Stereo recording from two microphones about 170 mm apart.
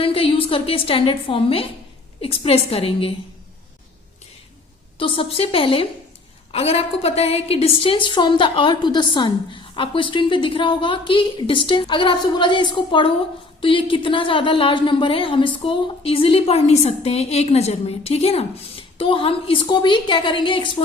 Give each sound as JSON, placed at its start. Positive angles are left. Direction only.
{"t": 0.0, "sound": "a woman's voice", "side_deg": 30}
{"t": 4.9, "sound": "a woman's voice", "side_deg": 30}